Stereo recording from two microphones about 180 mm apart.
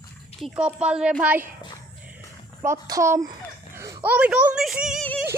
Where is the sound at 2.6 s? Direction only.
15° right (ahead or behind).